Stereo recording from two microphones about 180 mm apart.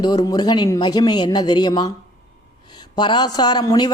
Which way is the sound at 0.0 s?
20° left (ahead or behind).